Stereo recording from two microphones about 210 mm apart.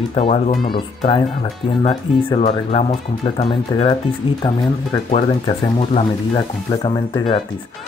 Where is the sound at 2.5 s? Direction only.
25° left (ahead or behind).